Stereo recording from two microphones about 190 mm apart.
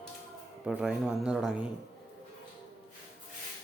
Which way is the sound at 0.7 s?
5° right (ahead or behind).